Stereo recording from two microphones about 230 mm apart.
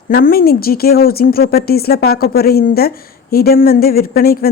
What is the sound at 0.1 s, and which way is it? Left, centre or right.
Speech, left.